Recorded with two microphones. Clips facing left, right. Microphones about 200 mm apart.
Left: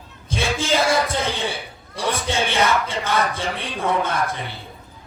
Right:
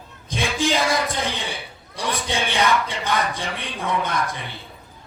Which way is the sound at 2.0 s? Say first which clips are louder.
Left 2 dB; 15° right (ahead or behind).